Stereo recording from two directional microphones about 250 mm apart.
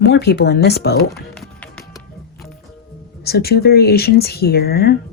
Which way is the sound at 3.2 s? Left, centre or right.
Left.